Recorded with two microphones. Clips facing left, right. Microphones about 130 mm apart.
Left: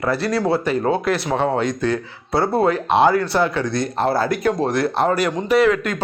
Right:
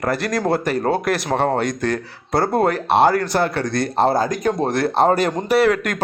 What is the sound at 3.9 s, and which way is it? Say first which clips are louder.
Speech: right 3 dB; 30° right (ahead or behind).